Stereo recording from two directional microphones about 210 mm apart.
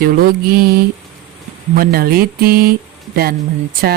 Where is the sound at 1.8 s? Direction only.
45° right (ahead or behind).